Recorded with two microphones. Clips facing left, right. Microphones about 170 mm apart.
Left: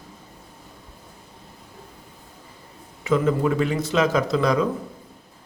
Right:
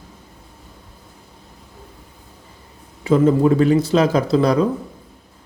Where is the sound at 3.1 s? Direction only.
35° right (ahead or behind).